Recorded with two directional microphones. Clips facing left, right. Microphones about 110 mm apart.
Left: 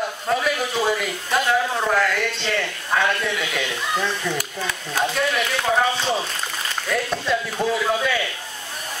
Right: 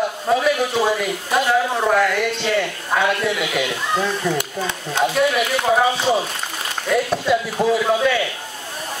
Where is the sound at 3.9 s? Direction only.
30° right (ahead or behind).